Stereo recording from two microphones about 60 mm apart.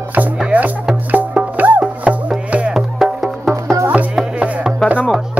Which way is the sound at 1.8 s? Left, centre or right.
Centre.